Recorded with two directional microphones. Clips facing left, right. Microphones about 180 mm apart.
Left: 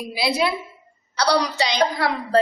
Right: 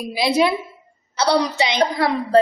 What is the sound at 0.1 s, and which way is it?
A woman's voice, 20° right (ahead or behind).